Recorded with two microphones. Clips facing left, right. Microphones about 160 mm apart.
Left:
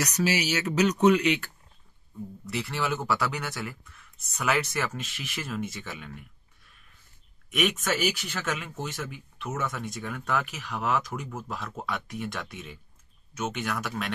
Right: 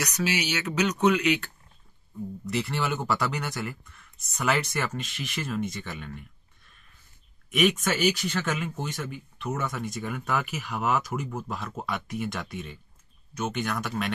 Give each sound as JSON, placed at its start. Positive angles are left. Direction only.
{"t": 0.0, "sound": "speech", "side_deg": 40}
{"t": 2.4, "sound": "speech", "side_deg": 0}
{"t": 7.5, "sound": "speech", "side_deg": 0}